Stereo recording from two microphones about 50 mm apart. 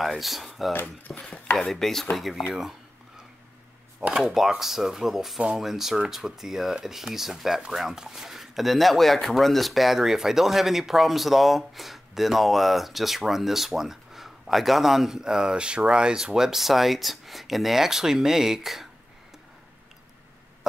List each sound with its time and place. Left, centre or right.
0.0 s speech: centre
0.7 s speech: left
1.6 s chopping: centre
2.1 s speech: centre
4.3 s speech: centre